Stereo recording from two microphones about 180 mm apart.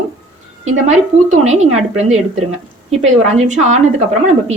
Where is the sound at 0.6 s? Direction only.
40° right (ahead or behind).